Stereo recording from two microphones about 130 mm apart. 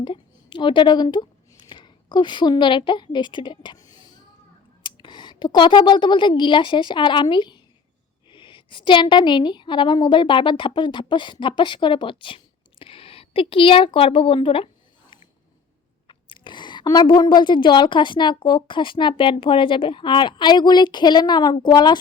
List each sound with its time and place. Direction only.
0.0 s a woman's voice: 40° left (ahead or behind)
3.8 s a sound: 30° left (ahead or behind)
4.8 s a woman's voice: 35° left (ahead or behind)
16.0 s speech: 40° left (ahead or behind)